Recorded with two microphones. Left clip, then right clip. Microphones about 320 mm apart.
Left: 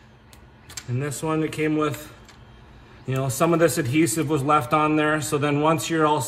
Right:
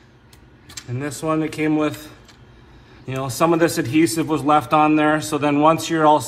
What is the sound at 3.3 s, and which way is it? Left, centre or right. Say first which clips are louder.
A man's voice: right 3 dB; centre.